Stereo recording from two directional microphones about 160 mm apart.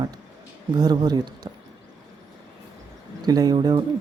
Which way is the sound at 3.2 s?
25° right (ahead or behind).